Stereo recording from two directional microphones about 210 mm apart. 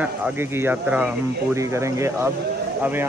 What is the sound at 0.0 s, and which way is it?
Speech, 10° right (ahead or behind).